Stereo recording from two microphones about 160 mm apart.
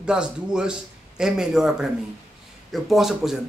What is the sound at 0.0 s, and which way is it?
A man's voice, 5° right (ahead or behind).